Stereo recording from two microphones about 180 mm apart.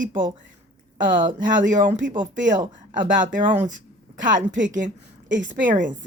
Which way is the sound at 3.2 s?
45° right (ahead or behind).